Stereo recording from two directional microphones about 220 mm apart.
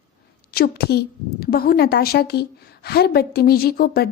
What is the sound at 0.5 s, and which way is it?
Speech, 45° left (ahead or behind).